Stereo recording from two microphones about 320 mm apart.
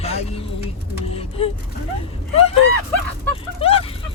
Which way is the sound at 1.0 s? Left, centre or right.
Centre.